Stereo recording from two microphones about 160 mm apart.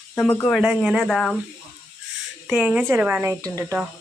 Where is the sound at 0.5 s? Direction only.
5° right (ahead or behind).